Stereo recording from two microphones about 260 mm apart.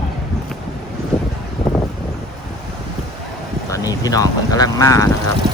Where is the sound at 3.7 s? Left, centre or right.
Centre.